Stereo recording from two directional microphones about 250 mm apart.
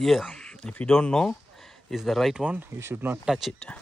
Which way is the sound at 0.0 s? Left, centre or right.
Centre.